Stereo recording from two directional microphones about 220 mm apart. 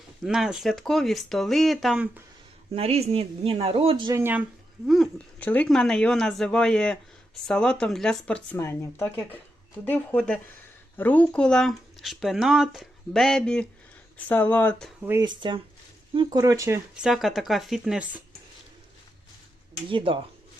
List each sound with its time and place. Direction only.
0.2 s speech: centre (ahead or behind)
2.7 s speech: 25° right (ahead or behind); by 4.4 s 10° right (ahead or behind)
4.9 s speech: centre (ahead or behind)
15.0 s speech: 10° right (ahead or behind)
15.4 s speech: 20° right (ahead or behind); by 18.2 s 5° right (ahead or behind)
19.9 s speech: 25° right (ahead or behind)